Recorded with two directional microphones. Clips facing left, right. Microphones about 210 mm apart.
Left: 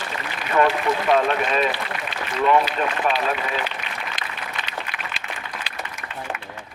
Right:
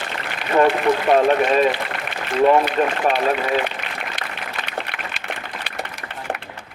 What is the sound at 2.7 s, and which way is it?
Speech, 55° right (ahead or behind).